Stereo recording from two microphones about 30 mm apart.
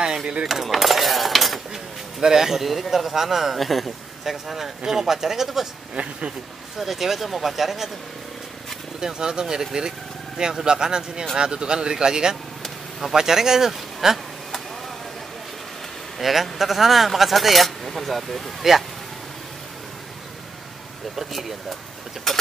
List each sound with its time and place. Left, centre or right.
0.0 s a sound: right
0.5 s speech: centre
1.7 s a sound: centre
2.6 s speech: centre
6.0 s speech: right
6.8 s speech: centre
9.0 s speech: right; by 14.2 s centre
16.2 s speech: centre
21.3 s speech: centre
22.3 s mechanisms: centre